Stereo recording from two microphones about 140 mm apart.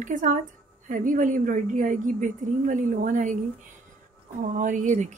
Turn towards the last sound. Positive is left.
turn(degrees=-60)  # may be behind; listen again after turning